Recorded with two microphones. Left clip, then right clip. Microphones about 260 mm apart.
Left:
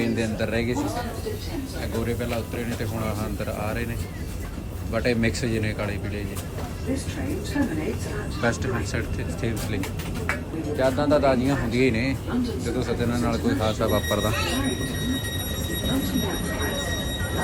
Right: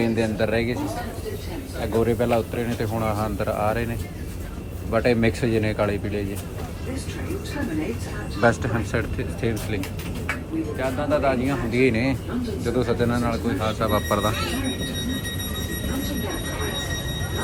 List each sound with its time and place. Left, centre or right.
0.0 s speech: centre
1.8 s a man's voice: centre
4.9 s a man's voice: centre
8.4 s a man's voice: centre